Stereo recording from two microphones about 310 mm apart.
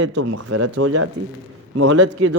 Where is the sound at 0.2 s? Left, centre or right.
Right.